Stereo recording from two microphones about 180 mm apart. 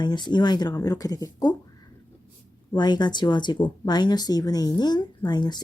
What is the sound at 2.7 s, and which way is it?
Speech, 25° left (ahead or behind).